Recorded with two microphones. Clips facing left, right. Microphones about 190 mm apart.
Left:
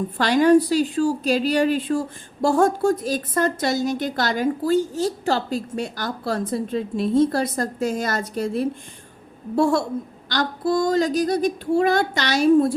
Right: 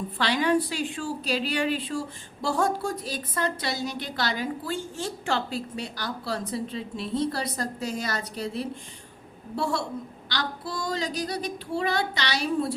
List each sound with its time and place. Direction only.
0.2 s a woman's voice: 45° left (ahead or behind)
10.2 s a woman's voice: 45° left (ahead or behind)